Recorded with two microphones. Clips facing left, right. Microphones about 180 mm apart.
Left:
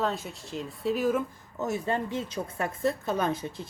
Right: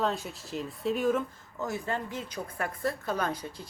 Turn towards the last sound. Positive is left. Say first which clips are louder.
# left 3 dB
turn(degrees=25)  # may be behind; listen again after turning